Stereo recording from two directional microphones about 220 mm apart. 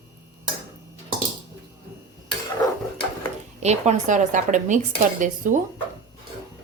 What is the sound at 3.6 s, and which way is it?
A woman's voice, 30° right (ahead or behind).